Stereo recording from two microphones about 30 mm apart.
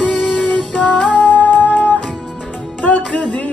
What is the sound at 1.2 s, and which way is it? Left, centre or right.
Music, left.